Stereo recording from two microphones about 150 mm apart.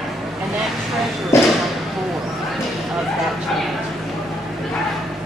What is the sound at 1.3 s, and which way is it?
Basketball bounce, 15° left (ahead or behind).